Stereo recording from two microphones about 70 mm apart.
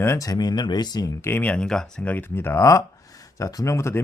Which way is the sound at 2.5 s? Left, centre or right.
Left.